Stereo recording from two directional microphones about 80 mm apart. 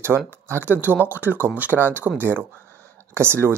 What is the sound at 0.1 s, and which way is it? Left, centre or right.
Speech, right.